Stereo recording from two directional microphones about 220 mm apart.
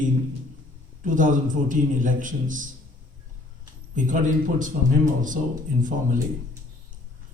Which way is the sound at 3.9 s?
35° right (ahead or behind).